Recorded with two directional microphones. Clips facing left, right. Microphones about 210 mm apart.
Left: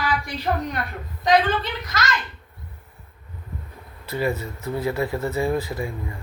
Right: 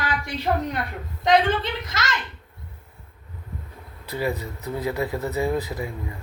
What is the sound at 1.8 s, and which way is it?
Speech, 25° right (ahead or behind).